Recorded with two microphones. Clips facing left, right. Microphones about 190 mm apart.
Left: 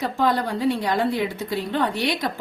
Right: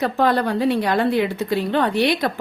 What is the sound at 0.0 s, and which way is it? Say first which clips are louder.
A woman's voice: right 3 dB; 65° right (ahead or behind).